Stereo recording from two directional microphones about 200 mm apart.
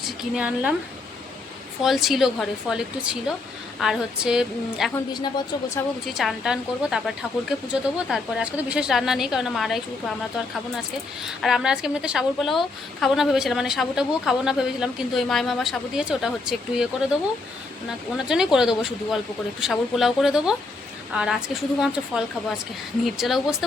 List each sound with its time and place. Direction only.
0.0 s speech: 5° right (ahead or behind)
1.8 s a woman's voice: centre (ahead or behind)
6.1 s a woman's voice: centre (ahead or behind)
18.3 s a woman's voice: 5° right (ahead or behind)